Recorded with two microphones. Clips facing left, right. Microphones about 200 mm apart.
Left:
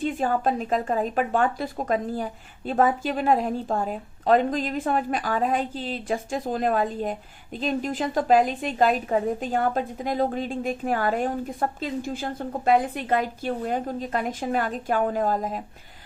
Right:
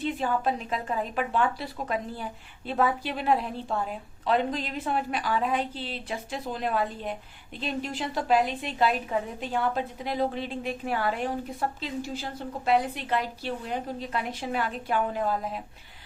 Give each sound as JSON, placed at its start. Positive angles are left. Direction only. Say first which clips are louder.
{"t": 0.0, "sound": "a woman's voice", "louder": "left 3 dB", "side_deg": 45}